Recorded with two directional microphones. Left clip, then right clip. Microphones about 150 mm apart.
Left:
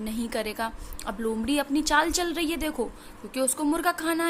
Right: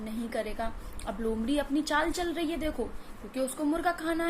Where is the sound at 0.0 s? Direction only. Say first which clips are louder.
Left 4 dB; 45° left (ahead or behind).